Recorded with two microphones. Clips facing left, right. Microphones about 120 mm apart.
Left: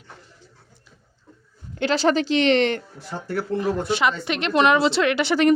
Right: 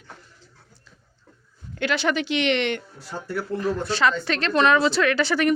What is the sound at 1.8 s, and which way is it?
Speech, 30° left (ahead or behind).